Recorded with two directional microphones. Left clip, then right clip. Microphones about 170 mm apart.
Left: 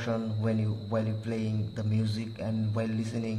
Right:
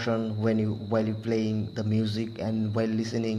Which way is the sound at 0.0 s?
25° right (ahead or behind).